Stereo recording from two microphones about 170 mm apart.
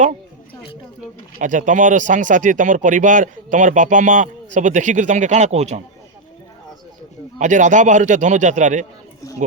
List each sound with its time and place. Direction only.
1.4 s speech: 50° right (ahead or behind)
7.3 s speech: 45° right (ahead or behind)